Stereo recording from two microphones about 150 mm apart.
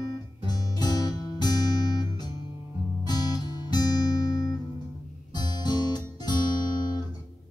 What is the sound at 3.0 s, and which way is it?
Guitar, 25° left (ahead or behind).